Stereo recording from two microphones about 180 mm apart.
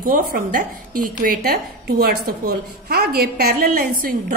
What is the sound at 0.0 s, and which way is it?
A woman's voice, 55° right (ahead or behind).